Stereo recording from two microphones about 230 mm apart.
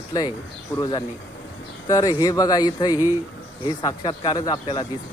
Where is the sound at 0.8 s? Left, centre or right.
Centre.